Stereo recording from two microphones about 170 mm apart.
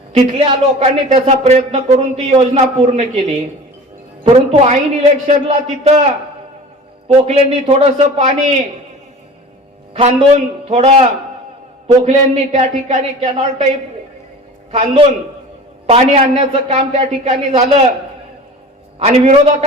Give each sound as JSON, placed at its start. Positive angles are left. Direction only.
{"t": 0.1, "sound": "speech", "side_deg": -35}
{"t": 7.1, "sound": "speech", "side_deg": -35}
{"t": 9.9, "sound": "speech", "side_deg": -40}
{"t": 14.7, "sound": "speech", "side_deg": -35}
{"t": 18.9, "sound": "speech", "side_deg": -40}